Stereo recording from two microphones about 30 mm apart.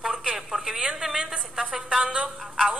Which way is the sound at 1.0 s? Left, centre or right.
Right.